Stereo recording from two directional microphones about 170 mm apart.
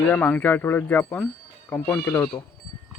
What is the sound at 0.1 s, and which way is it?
Speech, 10° left (ahead or behind).